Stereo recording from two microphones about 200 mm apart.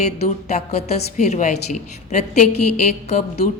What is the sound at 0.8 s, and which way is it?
A woman's voice, 35° left (ahead or behind).